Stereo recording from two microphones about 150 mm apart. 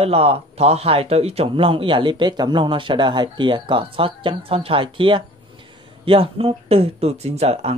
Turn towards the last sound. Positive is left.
turn(degrees=-45)  # may be behind; listen again after turning